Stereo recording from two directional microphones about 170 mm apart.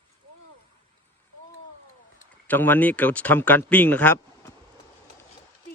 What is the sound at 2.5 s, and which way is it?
Speech, 10° left (ahead or behind).